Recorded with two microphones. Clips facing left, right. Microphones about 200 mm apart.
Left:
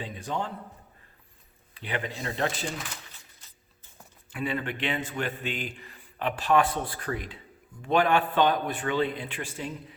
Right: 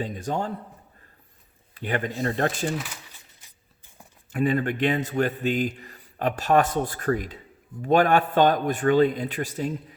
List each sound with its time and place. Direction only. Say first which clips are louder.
0.0 s a man's voice: right 5 dB; 45° right (ahead or behind)
1.7 s a man's voice: right 6 dB; 45° right (ahead or behind)
2.7 s speech: right 6 dB; 5° right (ahead or behind)
3.4 s a sound: even; 15° right (ahead or behind)
4.3 s a man's voice: right 8 dB; 45° right (ahead or behind)